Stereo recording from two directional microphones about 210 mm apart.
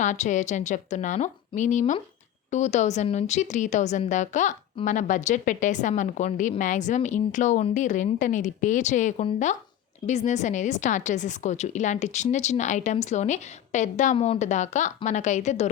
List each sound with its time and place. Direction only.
0.0 s a woman's voice: 35° left (ahead or behind)